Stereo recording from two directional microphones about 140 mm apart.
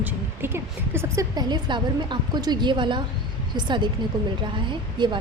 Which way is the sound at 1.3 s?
30° right (ahead or behind).